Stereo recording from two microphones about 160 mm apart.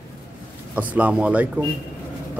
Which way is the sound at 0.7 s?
10° right (ahead or behind).